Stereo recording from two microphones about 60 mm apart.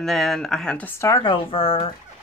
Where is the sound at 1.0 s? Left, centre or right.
Left.